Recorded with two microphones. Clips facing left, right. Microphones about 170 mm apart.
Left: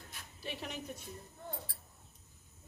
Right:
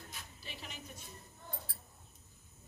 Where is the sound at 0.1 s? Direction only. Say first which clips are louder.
Left 6 dB; 60° left (ahead or behind).